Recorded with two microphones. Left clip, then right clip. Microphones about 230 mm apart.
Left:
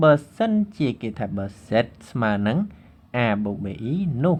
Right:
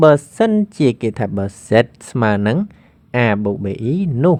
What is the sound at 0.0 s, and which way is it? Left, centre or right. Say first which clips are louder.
Speech: right 6 dB; right.